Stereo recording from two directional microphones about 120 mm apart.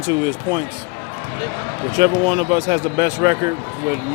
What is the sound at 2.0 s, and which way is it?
Speech, 20° right (ahead or behind).